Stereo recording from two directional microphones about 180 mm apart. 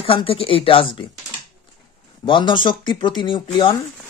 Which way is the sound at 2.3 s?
25° left (ahead or behind).